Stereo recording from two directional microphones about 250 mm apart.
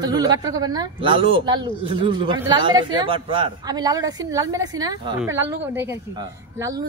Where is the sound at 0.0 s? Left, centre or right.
Centre.